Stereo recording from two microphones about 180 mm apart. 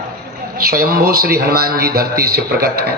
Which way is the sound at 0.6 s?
55° right (ahead or behind).